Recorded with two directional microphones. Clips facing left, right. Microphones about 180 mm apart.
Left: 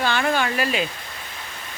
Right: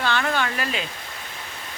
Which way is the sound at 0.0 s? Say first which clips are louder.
Left 2 dB; 10° left (ahead or behind).